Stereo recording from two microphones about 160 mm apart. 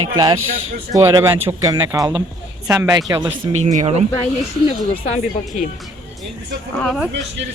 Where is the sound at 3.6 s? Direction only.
45° right (ahead or behind).